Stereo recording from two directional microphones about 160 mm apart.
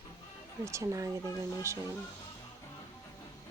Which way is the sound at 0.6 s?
20° right (ahead or behind).